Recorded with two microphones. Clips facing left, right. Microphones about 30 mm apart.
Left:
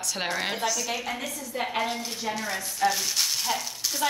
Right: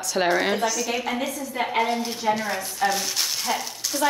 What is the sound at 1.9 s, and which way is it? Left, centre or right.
Speech, right.